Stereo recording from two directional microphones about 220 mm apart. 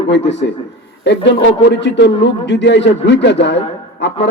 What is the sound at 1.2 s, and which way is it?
A man's voice, 50° left (ahead or behind).